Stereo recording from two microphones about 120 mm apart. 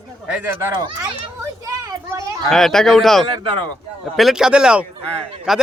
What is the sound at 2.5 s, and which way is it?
Speech, 5° left (ahead or behind).